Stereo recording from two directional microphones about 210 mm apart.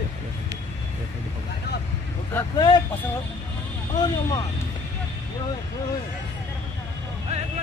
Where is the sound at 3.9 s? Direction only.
20° left (ahead or behind).